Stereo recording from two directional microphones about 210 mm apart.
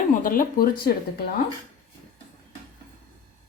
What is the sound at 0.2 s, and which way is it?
Speech, 40° left (ahead or behind).